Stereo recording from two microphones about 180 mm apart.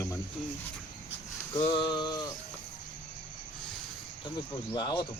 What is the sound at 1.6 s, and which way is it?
Speech, 25° left (ahead or behind).